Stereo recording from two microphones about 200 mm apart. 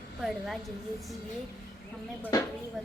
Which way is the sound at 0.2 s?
Centre (ahead or behind).